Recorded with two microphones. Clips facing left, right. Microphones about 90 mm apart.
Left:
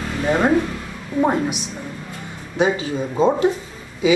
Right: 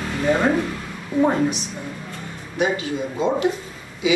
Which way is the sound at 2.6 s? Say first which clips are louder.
Left 3 dB; 30° left (ahead or behind).